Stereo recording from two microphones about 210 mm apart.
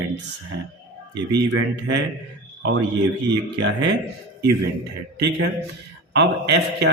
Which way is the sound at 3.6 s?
55° right (ahead or behind).